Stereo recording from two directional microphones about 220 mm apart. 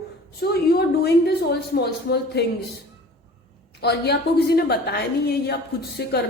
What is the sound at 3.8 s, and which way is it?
A woman's voice, 50° left (ahead or behind).